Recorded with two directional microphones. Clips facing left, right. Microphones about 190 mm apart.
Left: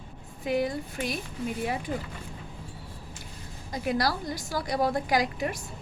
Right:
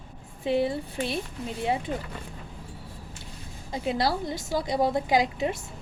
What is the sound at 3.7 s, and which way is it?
A woman's voice, 25° right (ahead or behind).